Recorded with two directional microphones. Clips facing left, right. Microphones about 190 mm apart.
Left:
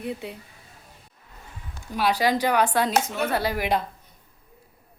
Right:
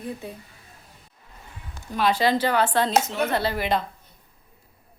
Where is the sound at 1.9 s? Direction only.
10° left (ahead or behind).